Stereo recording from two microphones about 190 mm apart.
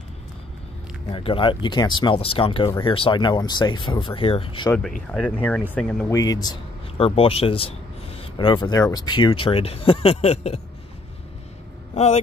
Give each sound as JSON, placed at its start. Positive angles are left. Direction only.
{"t": 1.1, "sound": "speech", "side_deg": 25}
{"t": 4.6, "sound": "speech", "side_deg": 5}
{"t": 6.0, "sound": "speech", "side_deg": 20}
{"t": 11.9, "sound": "speech", "side_deg": 35}